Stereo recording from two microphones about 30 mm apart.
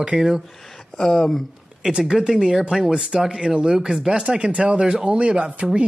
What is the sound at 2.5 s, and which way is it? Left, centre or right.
Speech, centre.